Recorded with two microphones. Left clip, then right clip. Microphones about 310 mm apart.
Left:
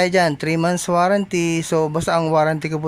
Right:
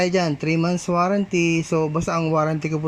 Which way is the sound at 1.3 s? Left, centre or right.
Centre.